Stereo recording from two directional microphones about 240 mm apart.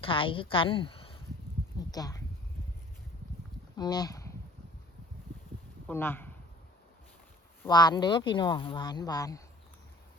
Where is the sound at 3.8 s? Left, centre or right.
Centre.